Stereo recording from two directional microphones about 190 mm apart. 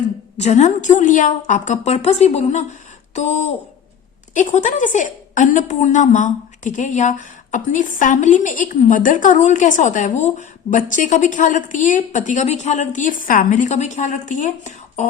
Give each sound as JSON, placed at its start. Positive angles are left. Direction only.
{"t": 0.3, "sound": "a woman's voice", "side_deg": 35}